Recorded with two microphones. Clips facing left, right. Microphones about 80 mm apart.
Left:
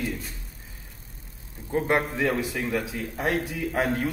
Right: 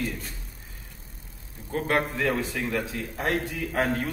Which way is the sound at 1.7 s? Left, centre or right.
Centre.